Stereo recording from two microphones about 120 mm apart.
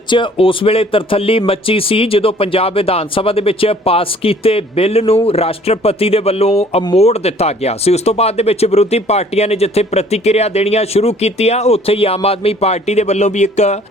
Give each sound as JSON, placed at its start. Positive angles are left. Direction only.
{"t": 0.1, "sound": "speech", "side_deg": 45}